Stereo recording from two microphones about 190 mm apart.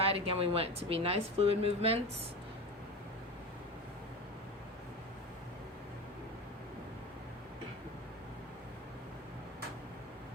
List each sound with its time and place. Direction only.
0.0 s speech: 30° right (ahead or behind)